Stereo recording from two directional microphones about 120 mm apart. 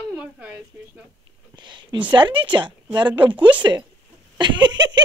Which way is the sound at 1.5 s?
40° right (ahead or behind).